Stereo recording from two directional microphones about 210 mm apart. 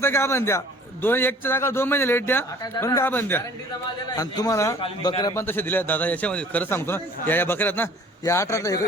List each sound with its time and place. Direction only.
0.0 s a man's voice: 10° left (ahead or behind)